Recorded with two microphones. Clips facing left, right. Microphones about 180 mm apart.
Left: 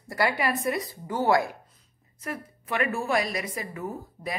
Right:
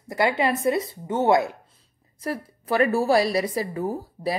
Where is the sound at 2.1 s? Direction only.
35° right (ahead or behind).